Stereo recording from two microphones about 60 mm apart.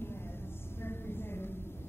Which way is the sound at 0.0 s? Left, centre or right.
Left.